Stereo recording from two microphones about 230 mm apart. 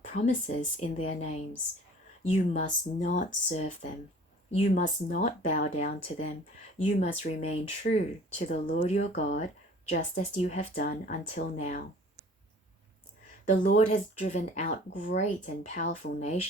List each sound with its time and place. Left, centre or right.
0.2 s speech: left
13.7 s speech: left